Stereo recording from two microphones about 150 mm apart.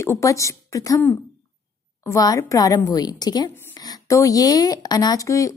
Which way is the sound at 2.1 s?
25° left (ahead or behind).